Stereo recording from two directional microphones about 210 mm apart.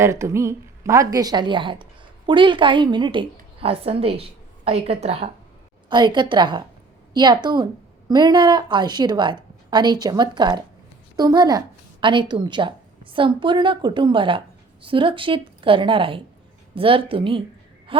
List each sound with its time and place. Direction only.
0.0 s a woman's voice: 15° right (ahead or behind)